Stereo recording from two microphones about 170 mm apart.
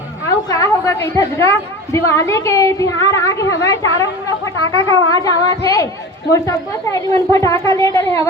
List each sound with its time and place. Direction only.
0.3 s a woman's voice: 20° left (ahead or behind)